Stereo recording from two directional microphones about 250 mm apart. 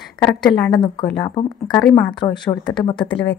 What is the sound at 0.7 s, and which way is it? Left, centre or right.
Speech, centre.